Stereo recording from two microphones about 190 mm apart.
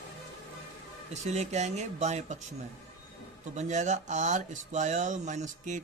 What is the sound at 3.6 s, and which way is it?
Speech, 40° right (ahead or behind).